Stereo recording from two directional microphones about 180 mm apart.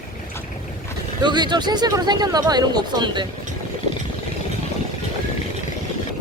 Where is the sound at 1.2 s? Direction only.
25° right (ahead or behind).